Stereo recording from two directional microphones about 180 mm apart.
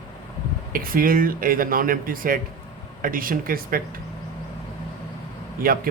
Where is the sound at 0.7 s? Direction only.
50° right (ahead or behind).